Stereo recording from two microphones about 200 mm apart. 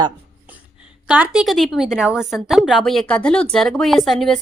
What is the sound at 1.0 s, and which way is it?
A woman's voice, 5° right (ahead or behind).